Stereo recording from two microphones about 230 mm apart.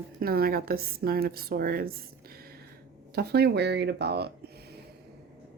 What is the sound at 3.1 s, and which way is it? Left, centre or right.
Speech, right.